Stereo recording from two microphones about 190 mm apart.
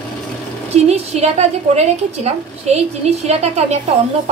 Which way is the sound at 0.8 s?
35° right (ahead or behind).